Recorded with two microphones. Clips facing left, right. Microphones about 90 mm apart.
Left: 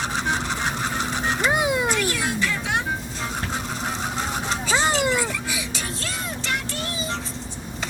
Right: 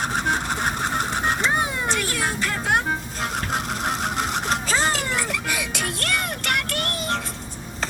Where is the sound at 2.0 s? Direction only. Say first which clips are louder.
Left 1 dB; 45° right (ahead or behind); by 7.2 s 60° right (ahead or behind).